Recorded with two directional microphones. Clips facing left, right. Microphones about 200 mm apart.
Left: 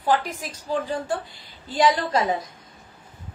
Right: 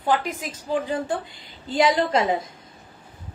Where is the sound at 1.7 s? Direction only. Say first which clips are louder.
Right 1 dB; 25° right (ahead or behind).